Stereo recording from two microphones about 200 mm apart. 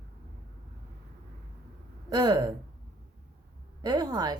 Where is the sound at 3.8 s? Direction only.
20° right (ahead or behind).